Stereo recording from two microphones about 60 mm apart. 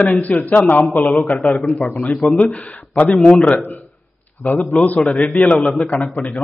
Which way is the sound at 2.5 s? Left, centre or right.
Left.